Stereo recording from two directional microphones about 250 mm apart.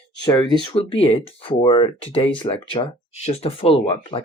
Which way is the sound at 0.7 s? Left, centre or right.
Left.